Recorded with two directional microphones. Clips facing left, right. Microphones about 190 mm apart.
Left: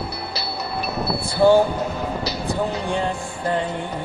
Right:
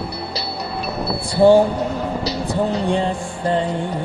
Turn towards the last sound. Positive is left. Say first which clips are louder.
# right 3 dB
turn(degrees=-30)  # may be behind; listen again after turning